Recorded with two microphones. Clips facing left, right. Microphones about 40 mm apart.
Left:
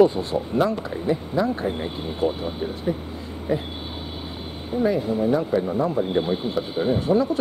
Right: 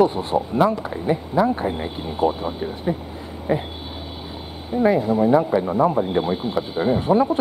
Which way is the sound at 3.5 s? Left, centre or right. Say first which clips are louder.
Right 3 dB; right.